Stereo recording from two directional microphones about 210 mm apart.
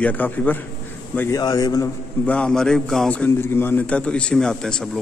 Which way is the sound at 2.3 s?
5° left (ahead or behind).